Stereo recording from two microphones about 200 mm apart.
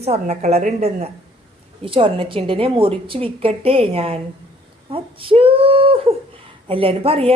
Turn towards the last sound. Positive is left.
turn(degrees=-30)  # may be behind; listen again after turning